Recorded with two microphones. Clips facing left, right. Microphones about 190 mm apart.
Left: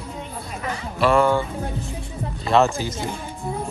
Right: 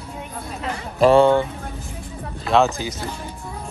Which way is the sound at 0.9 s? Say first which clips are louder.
Right 4 dB; 30° right (ahead or behind).